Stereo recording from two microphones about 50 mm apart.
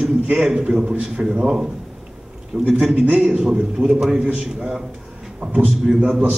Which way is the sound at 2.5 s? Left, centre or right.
Right.